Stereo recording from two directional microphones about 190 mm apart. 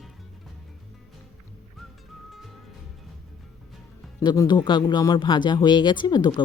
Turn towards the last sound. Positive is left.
turn(degrees=25)  # may be behind; listen again after turning